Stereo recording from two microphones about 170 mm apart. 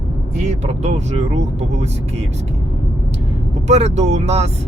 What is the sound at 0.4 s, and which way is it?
Speech, 40° right (ahead or behind).